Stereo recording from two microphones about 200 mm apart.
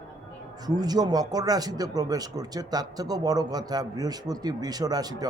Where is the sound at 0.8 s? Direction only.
20° right (ahead or behind).